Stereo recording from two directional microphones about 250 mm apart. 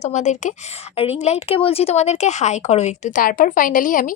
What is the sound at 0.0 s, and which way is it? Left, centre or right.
A woman's voice, left.